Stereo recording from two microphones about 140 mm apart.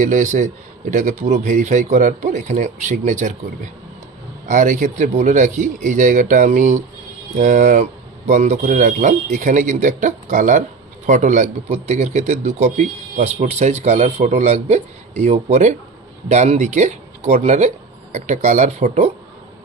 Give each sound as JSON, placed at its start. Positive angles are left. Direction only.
{"t": 0.0, "sound": "a man's voice", "side_deg": -65}
{"t": 4.4, "sound": "a man's voice", "side_deg": -65}